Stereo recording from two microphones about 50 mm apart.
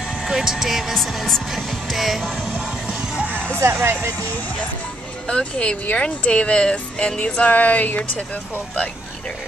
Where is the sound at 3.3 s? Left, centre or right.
Left.